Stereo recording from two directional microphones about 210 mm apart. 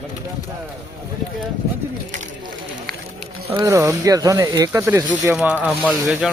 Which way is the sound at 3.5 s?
15° right (ahead or behind).